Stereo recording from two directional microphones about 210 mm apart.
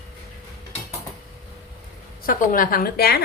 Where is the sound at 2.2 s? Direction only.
40° left (ahead or behind).